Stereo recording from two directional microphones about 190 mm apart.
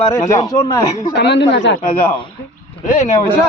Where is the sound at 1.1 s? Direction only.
65° left (ahead or behind).